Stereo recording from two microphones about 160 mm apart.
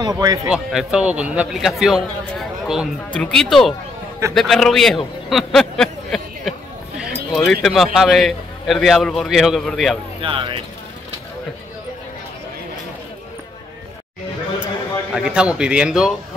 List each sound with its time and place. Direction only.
0.0 s speech: 25° right (ahead or behind)
0.5 s a man's voice: 5° right (ahead or behind)
7.0 s a sound: centre (ahead or behind)
7.6 s speech: centre (ahead or behind)
10.2 s speech: 35° right (ahead or behind)
15.1 s speech: 5° right (ahead or behind)